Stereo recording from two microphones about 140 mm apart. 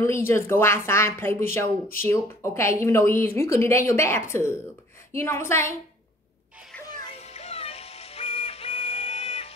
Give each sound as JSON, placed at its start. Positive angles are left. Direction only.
{"t": 0.0, "sound": "speech", "side_deg": 20}
{"t": 7.2, "sound": "music", "side_deg": 50}